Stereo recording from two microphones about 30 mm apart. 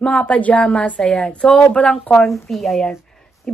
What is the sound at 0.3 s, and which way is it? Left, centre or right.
Speech, left.